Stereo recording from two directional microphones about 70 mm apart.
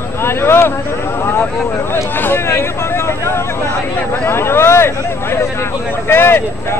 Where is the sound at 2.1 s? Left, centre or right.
Left.